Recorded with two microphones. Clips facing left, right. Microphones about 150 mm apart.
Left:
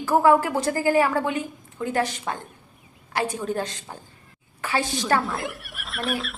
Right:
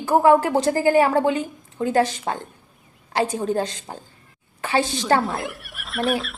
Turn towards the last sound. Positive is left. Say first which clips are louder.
# right 5 dB
turn(degrees=0)  # may be behind; listen again after turning